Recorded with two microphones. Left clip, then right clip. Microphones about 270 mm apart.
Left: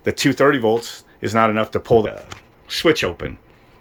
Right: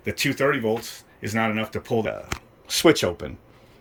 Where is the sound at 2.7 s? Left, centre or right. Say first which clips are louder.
Left 1 dB; centre.